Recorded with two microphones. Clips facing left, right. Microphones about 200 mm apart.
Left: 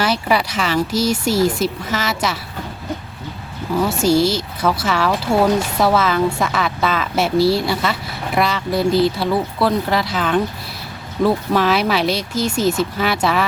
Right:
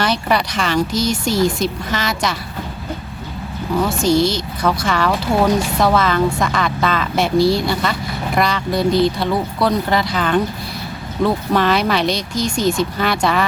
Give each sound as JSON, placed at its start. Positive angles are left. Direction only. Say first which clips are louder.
{"t": 0.0, "sound": "speech", "louder": "even", "side_deg": 5}
{"t": 3.8, "sound": "speech", "louder": "even", "side_deg": 5}